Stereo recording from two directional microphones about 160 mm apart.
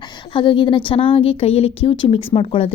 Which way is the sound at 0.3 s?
30° left (ahead or behind).